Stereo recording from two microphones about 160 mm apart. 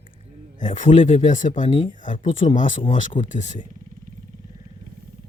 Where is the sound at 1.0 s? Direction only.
45° left (ahead or behind).